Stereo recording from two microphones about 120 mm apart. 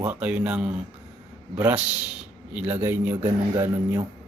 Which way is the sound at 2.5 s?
15° right (ahead or behind).